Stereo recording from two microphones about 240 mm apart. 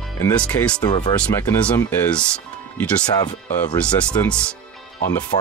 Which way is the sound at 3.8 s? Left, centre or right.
Centre.